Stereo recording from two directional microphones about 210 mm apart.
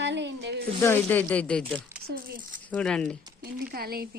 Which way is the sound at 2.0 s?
45° right (ahead or behind).